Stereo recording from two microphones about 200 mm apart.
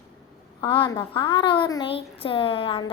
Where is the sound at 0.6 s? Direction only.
25° left (ahead or behind).